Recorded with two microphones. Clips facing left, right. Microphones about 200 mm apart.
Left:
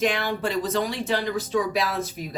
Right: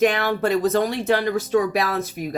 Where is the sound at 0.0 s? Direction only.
60° right (ahead or behind).